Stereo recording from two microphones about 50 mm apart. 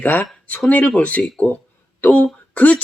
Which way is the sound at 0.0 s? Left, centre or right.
Left.